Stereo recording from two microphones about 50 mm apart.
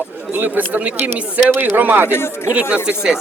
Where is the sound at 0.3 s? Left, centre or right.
Right.